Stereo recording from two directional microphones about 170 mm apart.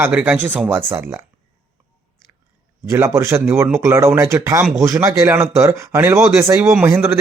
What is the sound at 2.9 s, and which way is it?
Speech, 15° right (ahead or behind).